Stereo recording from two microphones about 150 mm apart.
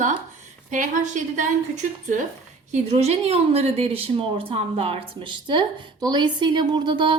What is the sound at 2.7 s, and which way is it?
A woman's voice, 45° right (ahead or behind).